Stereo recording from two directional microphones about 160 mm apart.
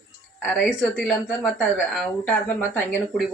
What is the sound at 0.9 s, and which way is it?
Speech, 5° left (ahead or behind).